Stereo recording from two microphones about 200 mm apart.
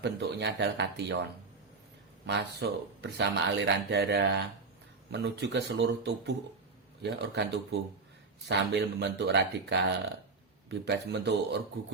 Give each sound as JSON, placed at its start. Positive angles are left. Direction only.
{"t": 0.0, "sound": "speech", "side_deg": -60}